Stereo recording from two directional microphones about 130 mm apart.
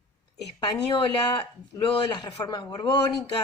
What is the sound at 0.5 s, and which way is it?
Speech, 35° left (ahead or behind).